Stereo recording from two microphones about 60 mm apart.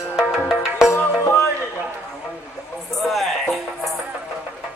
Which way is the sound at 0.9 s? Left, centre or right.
Left.